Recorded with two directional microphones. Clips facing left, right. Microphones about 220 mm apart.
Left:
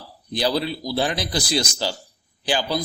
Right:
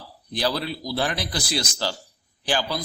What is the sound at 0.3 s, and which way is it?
A man's voice, 15° left (ahead or behind).